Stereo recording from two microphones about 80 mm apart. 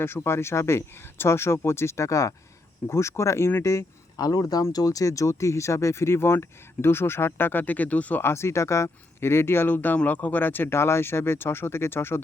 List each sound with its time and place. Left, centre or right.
0.0 s speech: left
4.2 s speech: left; by 8.2 s centre
8.2 s speech: left